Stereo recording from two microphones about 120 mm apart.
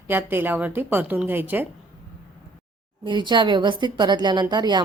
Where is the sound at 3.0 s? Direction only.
40° right (ahead or behind).